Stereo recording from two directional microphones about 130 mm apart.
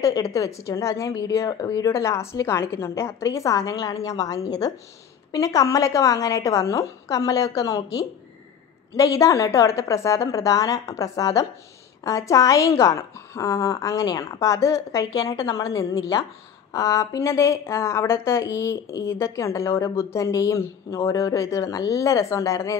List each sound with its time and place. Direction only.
0.0 s a woman's voice: 25° left (ahead or behind)